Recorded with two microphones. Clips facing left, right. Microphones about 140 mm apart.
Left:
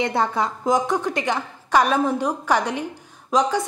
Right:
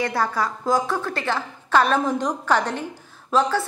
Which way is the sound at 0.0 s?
20° left (ahead or behind).